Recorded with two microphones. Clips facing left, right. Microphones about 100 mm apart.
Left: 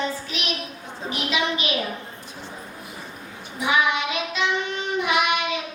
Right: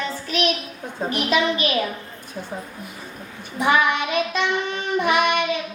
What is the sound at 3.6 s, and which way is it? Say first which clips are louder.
Child singing: right 3 dB; 55° right (ahead or behind).